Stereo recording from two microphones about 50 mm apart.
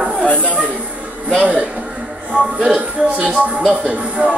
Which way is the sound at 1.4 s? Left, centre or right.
Right.